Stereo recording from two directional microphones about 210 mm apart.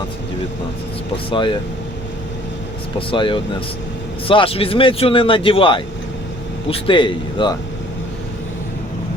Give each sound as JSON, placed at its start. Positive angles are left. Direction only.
{"t": 1.1, "sound": "speech", "side_deg": 25}
{"t": 3.1, "sound": "speech", "side_deg": 25}